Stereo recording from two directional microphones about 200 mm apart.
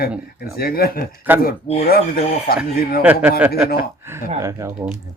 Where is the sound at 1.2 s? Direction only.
10° right (ahead or behind).